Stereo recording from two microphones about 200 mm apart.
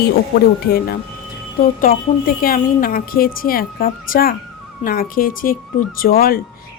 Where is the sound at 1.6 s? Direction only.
45° left (ahead or behind).